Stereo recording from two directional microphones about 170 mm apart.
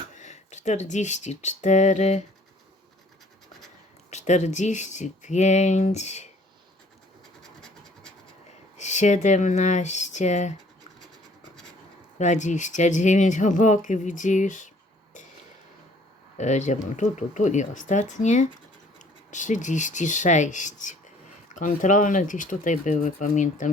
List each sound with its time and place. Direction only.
0.2 s speech: 45° left (ahead or behind)
4.1 s speech: 45° left (ahead or behind)
7.4 s scratch: 5° left (ahead or behind)
8.8 s speech: 45° left (ahead or behind)
12.2 s speech: 45° left (ahead or behind)
16.4 s speech: 45° left (ahead or behind)